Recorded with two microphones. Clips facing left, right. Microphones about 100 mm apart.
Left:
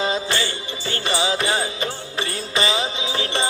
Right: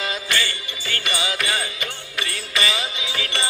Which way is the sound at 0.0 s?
30° left (ahead or behind).